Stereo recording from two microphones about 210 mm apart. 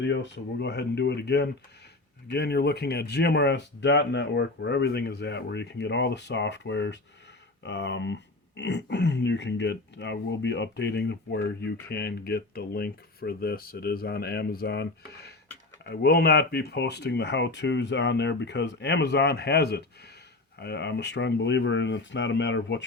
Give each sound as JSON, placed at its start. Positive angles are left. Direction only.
{"t": 0.0, "sound": "speech", "side_deg": 55}